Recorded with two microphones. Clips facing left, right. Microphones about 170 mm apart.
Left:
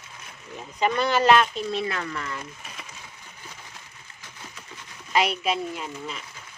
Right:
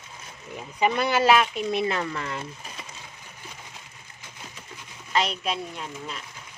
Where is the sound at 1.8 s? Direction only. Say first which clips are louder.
Right 3 dB; 25° right (ahead or behind).